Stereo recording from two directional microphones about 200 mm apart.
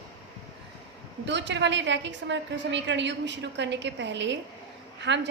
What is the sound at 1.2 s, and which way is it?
A woman's voice, 60° right (ahead or behind).